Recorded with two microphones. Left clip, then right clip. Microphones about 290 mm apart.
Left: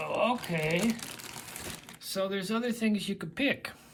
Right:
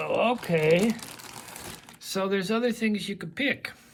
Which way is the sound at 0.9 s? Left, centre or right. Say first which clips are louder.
Right 2 dB; centre.